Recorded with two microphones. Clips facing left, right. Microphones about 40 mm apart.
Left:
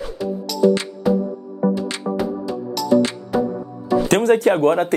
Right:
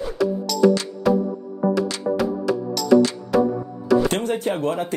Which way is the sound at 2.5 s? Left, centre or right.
Right.